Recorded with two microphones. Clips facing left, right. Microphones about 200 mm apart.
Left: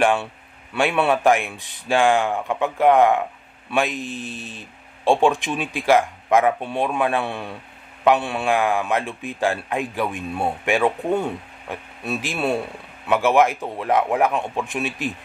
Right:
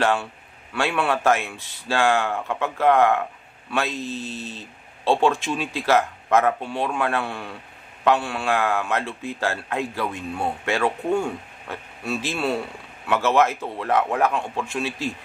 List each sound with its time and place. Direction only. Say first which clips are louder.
0.0 s a man's voice: left 3 dB; 15° left (ahead or behind)